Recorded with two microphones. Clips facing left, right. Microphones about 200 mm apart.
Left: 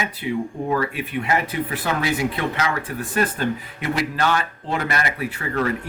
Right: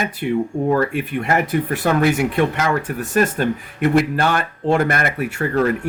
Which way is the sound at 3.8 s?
55° right (ahead or behind).